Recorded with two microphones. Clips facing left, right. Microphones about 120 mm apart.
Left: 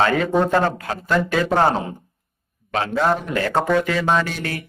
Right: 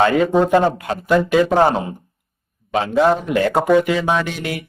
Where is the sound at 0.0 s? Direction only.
15° right (ahead or behind).